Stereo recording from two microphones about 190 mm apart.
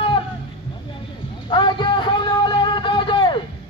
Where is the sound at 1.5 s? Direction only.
25° left (ahead or behind).